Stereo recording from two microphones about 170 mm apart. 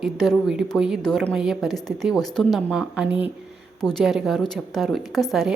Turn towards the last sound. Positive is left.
turn(degrees=0)  # may be behind; listen again after turning